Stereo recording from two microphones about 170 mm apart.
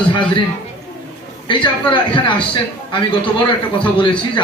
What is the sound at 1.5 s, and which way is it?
Speech, 30° left (ahead or behind).